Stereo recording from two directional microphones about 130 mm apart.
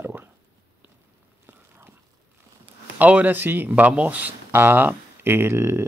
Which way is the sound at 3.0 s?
10° right (ahead or behind).